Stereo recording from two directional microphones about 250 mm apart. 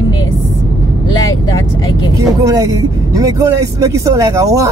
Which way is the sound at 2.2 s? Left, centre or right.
Centre.